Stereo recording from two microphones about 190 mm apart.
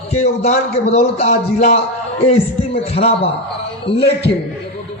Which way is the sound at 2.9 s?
30° left (ahead or behind).